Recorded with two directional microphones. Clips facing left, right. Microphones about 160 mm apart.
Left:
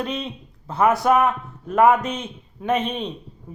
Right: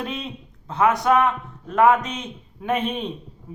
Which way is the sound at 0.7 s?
5° left (ahead or behind).